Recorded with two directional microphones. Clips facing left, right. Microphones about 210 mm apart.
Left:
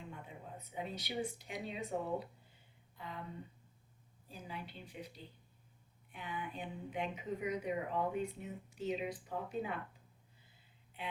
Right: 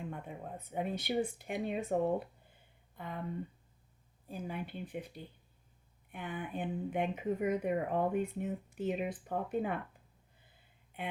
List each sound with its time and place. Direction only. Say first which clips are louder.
0.1 s a sound: right 6 dB; 55° right (ahead or behind)
1.4 s speech: right 7 dB; 50° right (ahead or behind)
4.3 s speech: right 7 dB; 55° right (ahead or behind)
11.0 s speech: right 4 dB; 55° right (ahead or behind)